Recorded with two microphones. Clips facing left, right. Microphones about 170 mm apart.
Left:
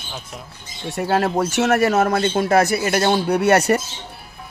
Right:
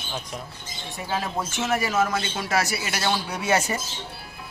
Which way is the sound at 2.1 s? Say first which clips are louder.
Left 9 dB; 50° left (ahead or behind).